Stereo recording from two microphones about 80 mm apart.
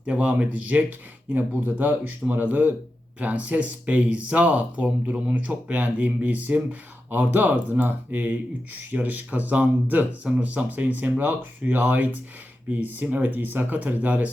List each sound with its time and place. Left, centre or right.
0.0 s speech: centre